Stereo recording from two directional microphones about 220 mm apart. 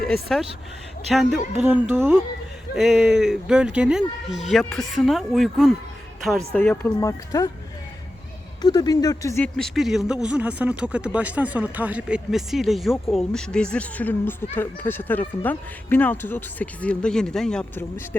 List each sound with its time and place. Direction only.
0.1 s a woman's voice: centre (ahead or behind)
8.6 s speech: 20° left (ahead or behind)
9.6 s speech: centre (ahead or behind)